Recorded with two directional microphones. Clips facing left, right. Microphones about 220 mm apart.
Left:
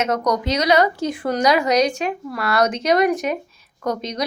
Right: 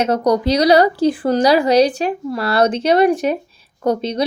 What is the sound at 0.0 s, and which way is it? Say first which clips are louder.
A woman's voice: right 5 dB; 35° right (ahead or behind).